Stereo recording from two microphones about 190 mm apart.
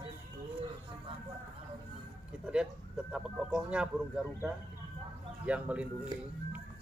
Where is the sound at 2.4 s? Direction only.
5° right (ahead or behind).